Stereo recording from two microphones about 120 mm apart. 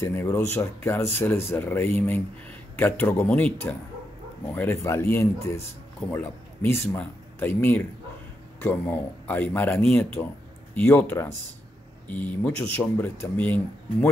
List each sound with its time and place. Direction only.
0.0 s speech: 20° left (ahead or behind)